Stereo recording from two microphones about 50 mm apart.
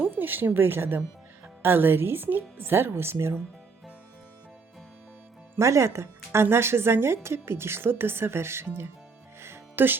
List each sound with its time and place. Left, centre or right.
0.0 s speech: right
5.5 s speech: right
9.7 s speech: right